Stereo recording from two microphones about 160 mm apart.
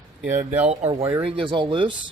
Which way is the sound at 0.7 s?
40° right (ahead or behind).